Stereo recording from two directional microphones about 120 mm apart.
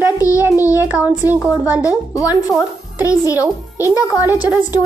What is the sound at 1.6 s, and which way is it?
Speech, 10° right (ahead or behind).